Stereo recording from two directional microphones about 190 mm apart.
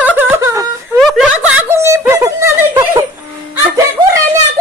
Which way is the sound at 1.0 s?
Centre (ahead or behind).